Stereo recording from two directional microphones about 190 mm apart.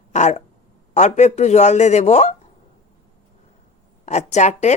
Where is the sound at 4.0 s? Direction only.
40° left (ahead or behind).